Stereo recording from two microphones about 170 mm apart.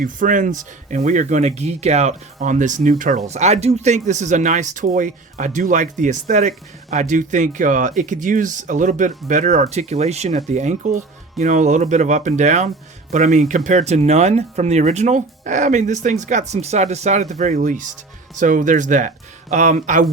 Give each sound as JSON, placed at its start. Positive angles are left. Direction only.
{"t": 0.0, "sound": "speech", "side_deg": -50}
{"t": 3.2, "sound": "speech", "side_deg": -40}